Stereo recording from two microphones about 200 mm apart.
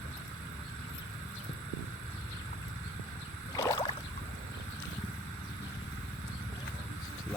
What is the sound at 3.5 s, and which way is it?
Rowboat, 20° left (ahead or behind).